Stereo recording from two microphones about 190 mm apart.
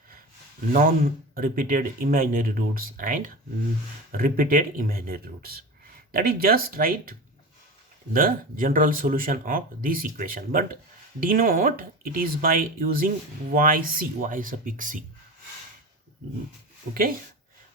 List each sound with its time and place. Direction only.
0.7 s speech: 50° right (ahead or behind)
16.9 s speech: 60° right (ahead or behind)